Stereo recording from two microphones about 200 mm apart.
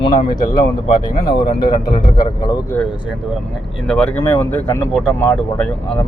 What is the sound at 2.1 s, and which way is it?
Speech, 20° left (ahead or behind).